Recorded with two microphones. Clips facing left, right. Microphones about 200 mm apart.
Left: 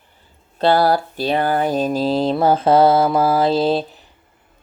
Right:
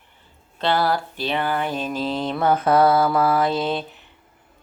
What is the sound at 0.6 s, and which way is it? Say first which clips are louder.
Speech: left 6 dB; 35° left (ahead or behind).